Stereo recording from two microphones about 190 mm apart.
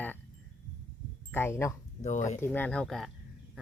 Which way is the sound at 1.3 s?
10° left (ahead or behind).